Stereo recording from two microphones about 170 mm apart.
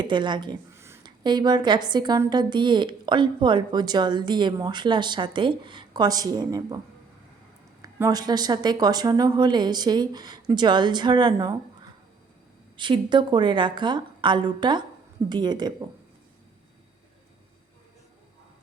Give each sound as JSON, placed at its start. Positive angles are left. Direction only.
{"t": 0.0, "sound": "a sound", "side_deg": -25}
{"t": 1.2, "sound": "a woman's voice", "side_deg": -25}
{"t": 7.8, "sound": "a woman's voice", "side_deg": -15}
{"t": 12.7, "sound": "a woman's voice", "side_deg": -30}